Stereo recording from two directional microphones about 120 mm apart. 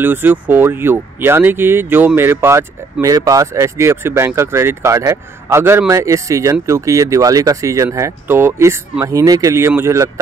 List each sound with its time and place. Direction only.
0.0 s a man's voice: 15° right (ahead or behind)